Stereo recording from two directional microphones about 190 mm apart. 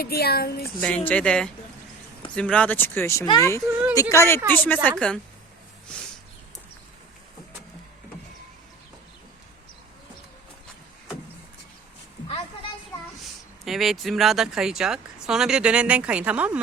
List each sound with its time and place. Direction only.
0.0 s speech: 55° left (ahead or behind)
0.8 s speech: 5° left (ahead or behind)
3.7 s a woman's voice: 10° right (ahead or behind)
4.1 s speech: 15° left (ahead or behind)
5.9 s a sound: 5° left (ahead or behind)
13.7 s speech: centre (ahead or behind)